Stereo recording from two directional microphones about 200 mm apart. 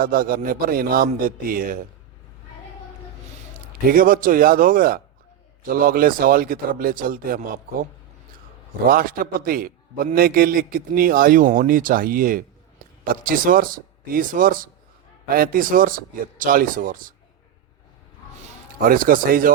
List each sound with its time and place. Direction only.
0.0 s a man's voice: 45° right (ahead or behind)
3.9 s a man's voice: 45° right (ahead or behind)
8.9 s a man's voice: 45° right (ahead or behind)
18.8 s a man's voice: 45° right (ahead or behind)